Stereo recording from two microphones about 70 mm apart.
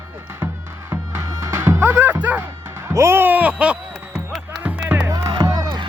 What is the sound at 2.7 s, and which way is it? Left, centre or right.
Music, right.